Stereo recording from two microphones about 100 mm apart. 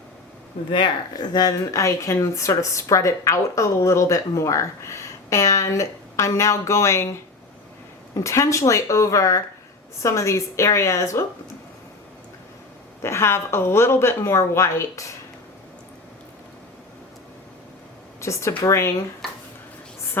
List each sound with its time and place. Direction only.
1.1 s speech: 40° left (ahead or behind)
8.1 s a woman's voice: 30° left (ahead or behind)
13.0 s a woman's voice: 25° left (ahead or behind)
18.2 s speech: 30° left (ahead or behind)
19.2 s a sound: centre (ahead or behind)